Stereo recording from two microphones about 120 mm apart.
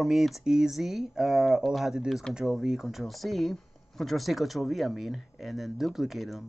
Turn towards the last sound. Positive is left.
turn(degrees=0)  # may be behind; listen again after turning